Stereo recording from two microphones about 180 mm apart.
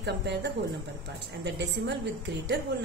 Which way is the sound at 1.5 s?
75° right (ahead or behind).